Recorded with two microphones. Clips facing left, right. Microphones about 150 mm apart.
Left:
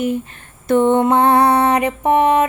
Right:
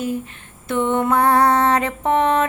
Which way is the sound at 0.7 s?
35° left (ahead or behind).